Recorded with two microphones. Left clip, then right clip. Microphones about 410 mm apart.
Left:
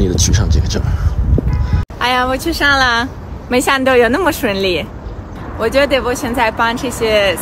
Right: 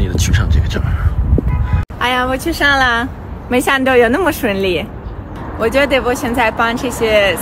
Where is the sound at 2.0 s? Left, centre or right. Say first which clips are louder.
Left 1 dB; centre.